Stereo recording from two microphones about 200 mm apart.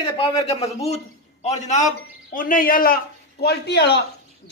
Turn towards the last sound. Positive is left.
turn(degrees=55)  # may be behind; listen again after turning